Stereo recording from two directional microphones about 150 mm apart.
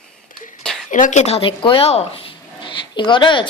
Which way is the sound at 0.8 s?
60° left (ahead or behind).